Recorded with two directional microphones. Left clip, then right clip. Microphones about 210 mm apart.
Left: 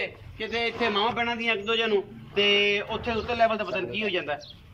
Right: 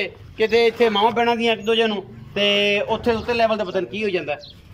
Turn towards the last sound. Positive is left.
turn(degrees=-20)  # may be behind; listen again after turning